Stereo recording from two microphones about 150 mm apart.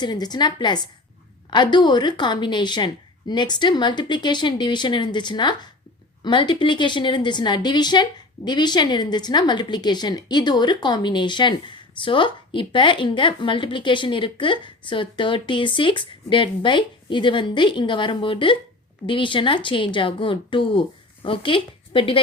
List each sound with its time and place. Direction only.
0.0 s a woman's voice: 30° left (ahead or behind)